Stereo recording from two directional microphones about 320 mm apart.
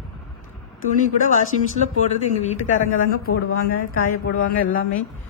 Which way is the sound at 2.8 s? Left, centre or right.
Left.